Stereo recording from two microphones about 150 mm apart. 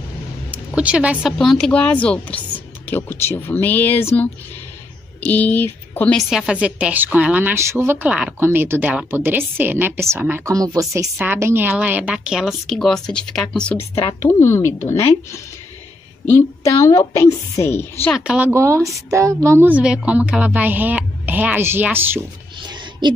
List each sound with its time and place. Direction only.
0.5 s a woman's voice: 10° right (ahead or behind); by 6.1 s 10° left (ahead or behind)
6.1 s a woman's voice: 5° right (ahead or behind)
14.2 s a woman's voice: 20° left (ahead or behind)
18.1 s a woman's voice: 5° right (ahead or behind)
18.5 s a woman's voice: 20° right (ahead or behind)
22.6 s a sound: 30° right (ahead or behind)